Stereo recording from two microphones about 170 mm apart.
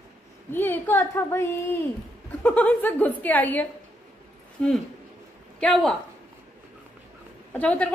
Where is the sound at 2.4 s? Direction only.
10° left (ahead or behind).